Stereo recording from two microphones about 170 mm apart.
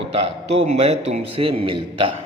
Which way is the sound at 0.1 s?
40° right (ahead or behind).